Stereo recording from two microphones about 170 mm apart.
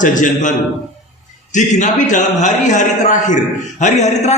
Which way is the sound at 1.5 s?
45° left (ahead or behind).